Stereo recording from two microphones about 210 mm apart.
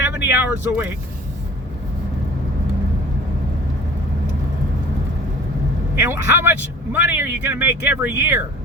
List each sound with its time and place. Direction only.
0.3 s a man's voice: 10° right (ahead or behind)
6.0 s a man's voice: 10° right (ahead or behind)